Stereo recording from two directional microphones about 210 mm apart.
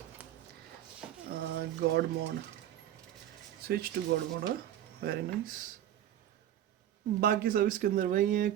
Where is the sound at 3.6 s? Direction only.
45° right (ahead or behind).